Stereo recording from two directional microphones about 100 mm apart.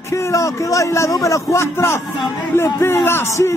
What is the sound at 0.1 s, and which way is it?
A man's voice, 30° left (ahead or behind).